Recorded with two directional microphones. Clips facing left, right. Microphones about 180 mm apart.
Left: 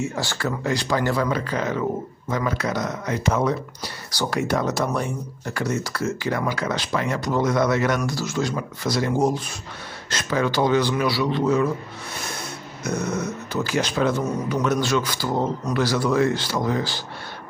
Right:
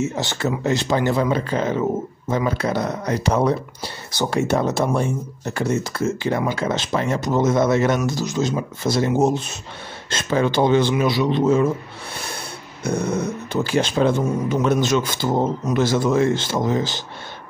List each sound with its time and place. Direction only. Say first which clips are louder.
0.0 s speech: right 3 dB; 20° right (ahead or behind)
12.8 s speech: right 4 dB; 30° right (ahead or behind)